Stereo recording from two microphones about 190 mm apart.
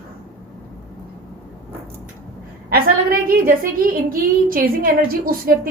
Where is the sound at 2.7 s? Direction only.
50° right (ahead or behind).